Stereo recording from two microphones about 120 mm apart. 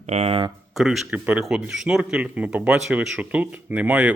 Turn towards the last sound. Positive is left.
turn(degrees=-15)  # may be behind; listen again after turning